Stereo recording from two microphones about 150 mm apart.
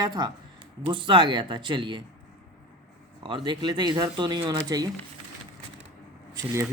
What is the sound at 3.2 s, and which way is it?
Speech, 30° right (ahead or behind).